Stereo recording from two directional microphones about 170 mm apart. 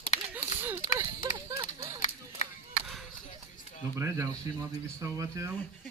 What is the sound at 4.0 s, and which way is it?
Speech, 20° right (ahead or behind).